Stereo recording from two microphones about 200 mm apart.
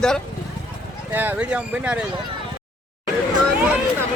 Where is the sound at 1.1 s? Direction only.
10° right (ahead or behind).